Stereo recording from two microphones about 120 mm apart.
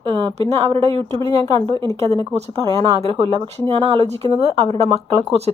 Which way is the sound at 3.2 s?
55° right (ahead or behind).